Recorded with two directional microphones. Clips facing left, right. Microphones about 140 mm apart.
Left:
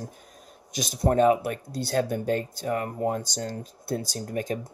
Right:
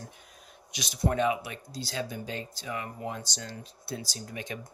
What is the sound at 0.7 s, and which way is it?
Speech, 45° left (ahead or behind).